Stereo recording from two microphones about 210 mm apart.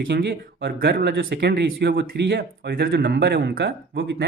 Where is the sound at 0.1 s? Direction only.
55° right (ahead or behind).